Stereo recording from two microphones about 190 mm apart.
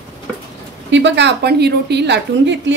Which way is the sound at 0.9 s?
70° right (ahead or behind).